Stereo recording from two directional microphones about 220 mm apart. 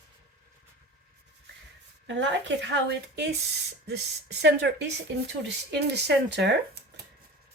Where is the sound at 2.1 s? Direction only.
55° right (ahead or behind).